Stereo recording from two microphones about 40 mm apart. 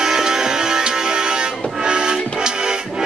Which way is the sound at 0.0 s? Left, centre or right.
Centre.